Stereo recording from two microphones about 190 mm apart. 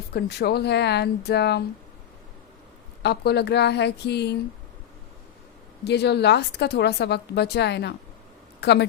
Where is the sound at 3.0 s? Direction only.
60° left (ahead or behind).